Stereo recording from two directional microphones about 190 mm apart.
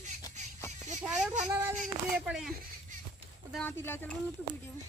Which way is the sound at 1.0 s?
5° right (ahead or behind).